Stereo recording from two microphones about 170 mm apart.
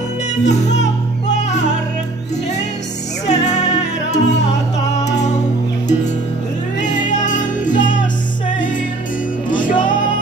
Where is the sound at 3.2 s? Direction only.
45° left (ahead or behind).